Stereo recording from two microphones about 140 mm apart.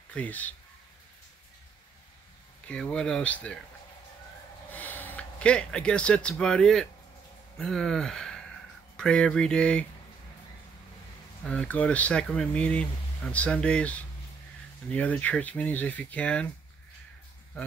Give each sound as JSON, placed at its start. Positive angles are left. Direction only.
{"t": 0.1, "sound": "speech", "side_deg": 10}
{"t": 2.7, "sound": "speech", "side_deg": 5}
{"t": 4.6, "sound": "speech", "side_deg": 10}
{"t": 11.4, "sound": "speech", "side_deg": 10}